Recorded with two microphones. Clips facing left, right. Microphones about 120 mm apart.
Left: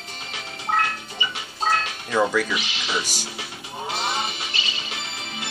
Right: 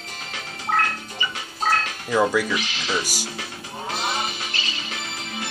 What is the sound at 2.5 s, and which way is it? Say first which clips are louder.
Speech: right 2 dB; 20° left (ahead or behind).